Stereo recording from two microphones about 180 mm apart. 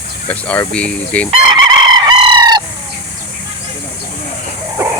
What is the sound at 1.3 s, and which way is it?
Chicken, 25° right (ahead or behind).